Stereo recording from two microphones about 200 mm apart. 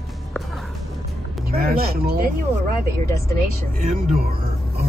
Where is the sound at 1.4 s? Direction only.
50° right (ahead or behind).